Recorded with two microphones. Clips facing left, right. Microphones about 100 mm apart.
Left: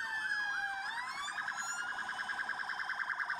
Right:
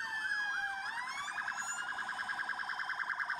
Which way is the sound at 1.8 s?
5° right (ahead or behind).